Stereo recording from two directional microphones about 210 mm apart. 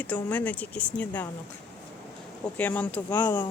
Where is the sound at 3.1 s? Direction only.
20° left (ahead or behind).